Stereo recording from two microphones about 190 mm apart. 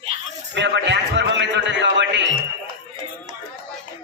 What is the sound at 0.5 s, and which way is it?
Music, 65° right (ahead or behind).